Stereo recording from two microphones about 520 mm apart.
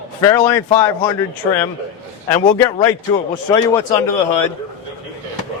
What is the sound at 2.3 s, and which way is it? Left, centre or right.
Speech, centre.